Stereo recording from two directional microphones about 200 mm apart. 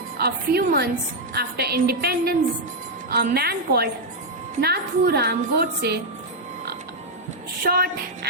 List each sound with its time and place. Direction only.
0.2 s a woman's voice: 50° right (ahead or behind)
7.6 s a woman's voice: 50° right (ahead or behind)